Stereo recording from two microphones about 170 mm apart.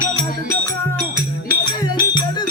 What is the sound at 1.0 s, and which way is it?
Music, 25° left (ahead or behind).